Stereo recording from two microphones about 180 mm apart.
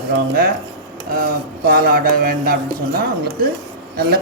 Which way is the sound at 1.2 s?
55° right (ahead or behind).